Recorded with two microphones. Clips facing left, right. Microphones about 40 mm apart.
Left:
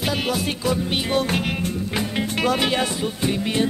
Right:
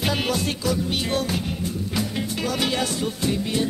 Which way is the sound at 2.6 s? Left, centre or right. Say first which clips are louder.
Left 2 dB; left.